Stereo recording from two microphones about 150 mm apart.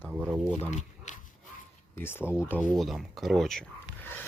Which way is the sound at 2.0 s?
15° left (ahead or behind).